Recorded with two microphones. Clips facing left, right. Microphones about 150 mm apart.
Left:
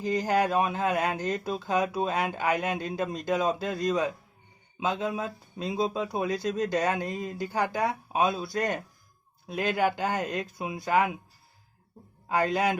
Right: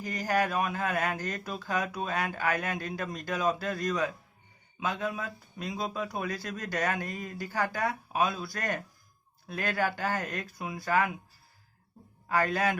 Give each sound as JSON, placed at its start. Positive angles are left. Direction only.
{"t": 0.0, "sound": "speech", "side_deg": 20}
{"t": 12.3, "sound": "speech", "side_deg": 20}